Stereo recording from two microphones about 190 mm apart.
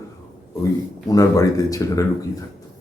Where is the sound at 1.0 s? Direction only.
20° left (ahead or behind).